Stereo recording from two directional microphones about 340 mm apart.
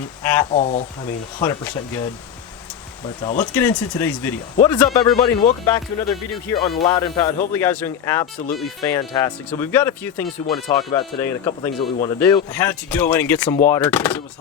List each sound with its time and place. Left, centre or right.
0.2 s speech: centre
0.5 s speech: centre
1.0 s speech: centre
3.2 s speech: centre
3.5 s speech: centre